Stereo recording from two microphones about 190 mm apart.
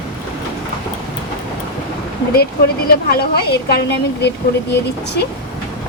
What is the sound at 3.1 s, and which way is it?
A woman's voice, 55° left (ahead or behind).